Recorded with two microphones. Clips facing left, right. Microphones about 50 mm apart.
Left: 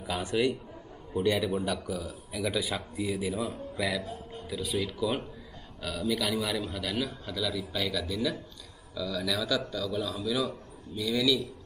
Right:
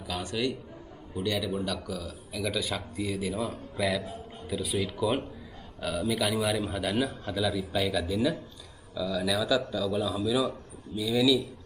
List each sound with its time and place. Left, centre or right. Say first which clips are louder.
0.0 s a man's voice: left 3 dB; centre